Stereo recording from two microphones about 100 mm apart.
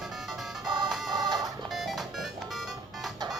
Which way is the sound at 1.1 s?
40° right (ahead or behind).